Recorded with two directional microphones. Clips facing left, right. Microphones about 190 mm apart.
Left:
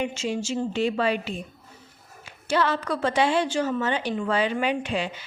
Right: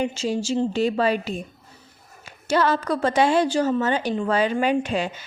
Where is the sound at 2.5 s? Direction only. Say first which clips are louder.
Right 3 dB; 40° right (ahead or behind).